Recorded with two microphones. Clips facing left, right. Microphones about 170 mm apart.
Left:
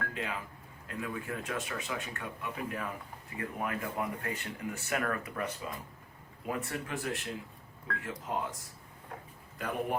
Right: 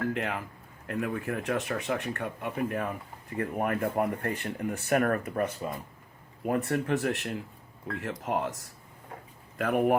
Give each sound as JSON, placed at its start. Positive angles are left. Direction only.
{"t": 0.1, "sound": "speech", "side_deg": -65}